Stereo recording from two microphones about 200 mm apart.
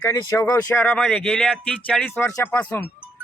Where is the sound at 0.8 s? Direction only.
5° left (ahead or behind).